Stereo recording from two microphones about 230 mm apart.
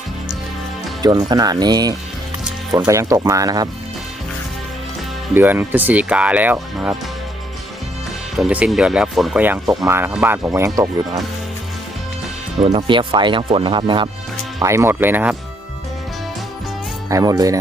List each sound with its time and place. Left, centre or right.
1.0 s speech: centre
5.3 s speech: centre
8.4 s speech: centre
12.5 s speech: right
17.1 s speech: centre